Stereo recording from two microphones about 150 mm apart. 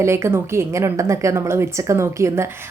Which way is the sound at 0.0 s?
20° right (ahead or behind).